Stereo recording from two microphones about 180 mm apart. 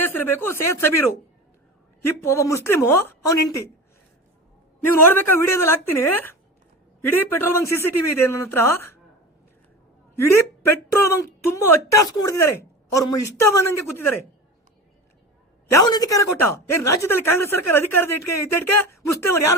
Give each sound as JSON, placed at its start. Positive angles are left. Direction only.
{"t": 0.0, "sound": "speech", "side_deg": 10}
{"t": 2.2, "sound": "speech", "side_deg": 15}
{"t": 4.9, "sound": "speech", "side_deg": 10}
{"t": 10.2, "sound": "speech", "side_deg": 15}
{"t": 15.7, "sound": "speech", "side_deg": 20}